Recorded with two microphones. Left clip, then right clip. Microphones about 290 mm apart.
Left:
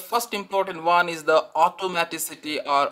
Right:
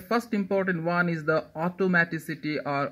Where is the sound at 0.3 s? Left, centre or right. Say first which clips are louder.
Left 2 dB; left.